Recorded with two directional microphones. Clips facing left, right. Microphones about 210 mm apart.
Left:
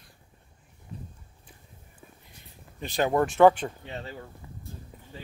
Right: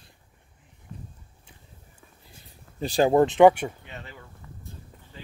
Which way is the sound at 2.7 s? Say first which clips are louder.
Right 5 dB; 30° right (ahead or behind).